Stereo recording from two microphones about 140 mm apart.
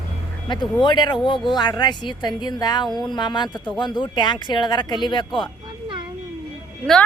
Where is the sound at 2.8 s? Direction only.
Centre (ahead or behind).